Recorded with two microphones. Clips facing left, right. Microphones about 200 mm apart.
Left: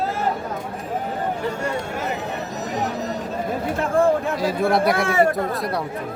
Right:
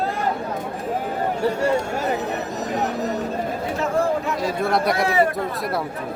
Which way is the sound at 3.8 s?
55° left (ahead or behind).